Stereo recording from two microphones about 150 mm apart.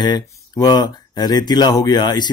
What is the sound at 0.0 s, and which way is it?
Speech, 25° left (ahead or behind).